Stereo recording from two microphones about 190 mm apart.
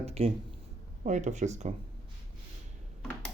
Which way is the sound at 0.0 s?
35° right (ahead or behind).